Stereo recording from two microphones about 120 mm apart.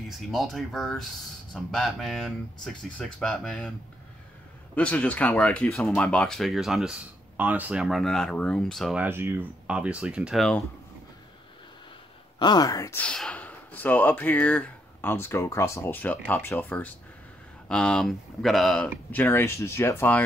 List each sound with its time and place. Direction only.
0.3 s speech: centre (ahead or behind)
4.7 s speech: 10° left (ahead or behind)
8.9 s speech: 15° right (ahead or behind)
12.4 s speech: 35° left (ahead or behind)
12.9 s speech: 5° left (ahead or behind)
19.1 s speech: 15° left (ahead or behind)